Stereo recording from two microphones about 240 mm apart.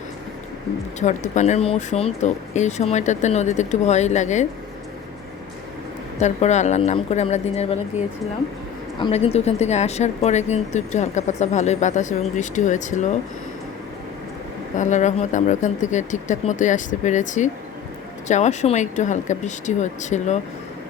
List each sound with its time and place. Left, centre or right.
0.9 s speech: left
6.1 s speech: left
9.0 s speech: left
14.8 s speech: left